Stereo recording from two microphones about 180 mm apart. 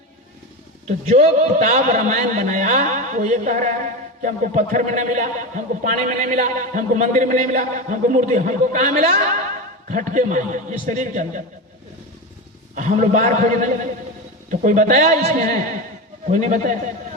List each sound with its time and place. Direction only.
0.9 s a man's voice: 40° right (ahead or behind)
12.7 s a man's voice: 40° right (ahead or behind)